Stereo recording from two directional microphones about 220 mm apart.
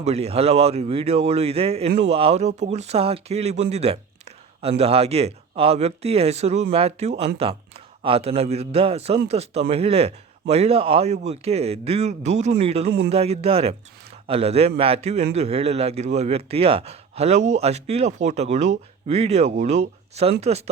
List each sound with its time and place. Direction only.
0.0 s a man's voice: 30° right (ahead or behind)